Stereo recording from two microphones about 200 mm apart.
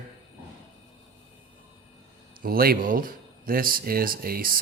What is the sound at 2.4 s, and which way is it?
Speech, 45° right (ahead or behind).